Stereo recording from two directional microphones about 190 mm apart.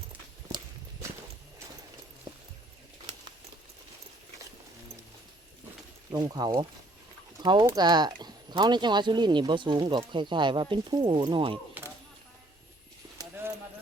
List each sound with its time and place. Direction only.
6.1 s speech: 20° right (ahead or behind)
13.1 s clip-clop: 20° right (ahead or behind)